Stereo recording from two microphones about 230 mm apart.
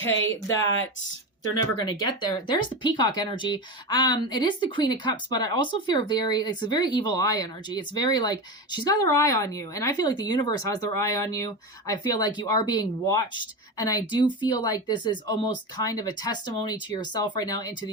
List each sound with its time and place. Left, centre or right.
1.7 s speech: centre